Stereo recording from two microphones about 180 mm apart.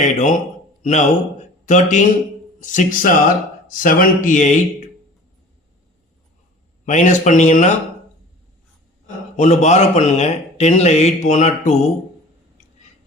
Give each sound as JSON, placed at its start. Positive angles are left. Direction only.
{"t": 0.0, "sound": "a man's voice", "side_deg": 40}
{"t": 6.8, "sound": "speech", "side_deg": 45}
{"t": 9.3, "sound": "speech", "side_deg": 40}